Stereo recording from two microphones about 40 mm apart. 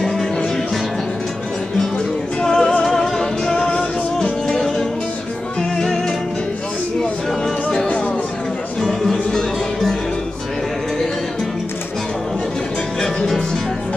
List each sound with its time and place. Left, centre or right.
2.4 s music: centre
9.1 s music: centre
13.0 s music: centre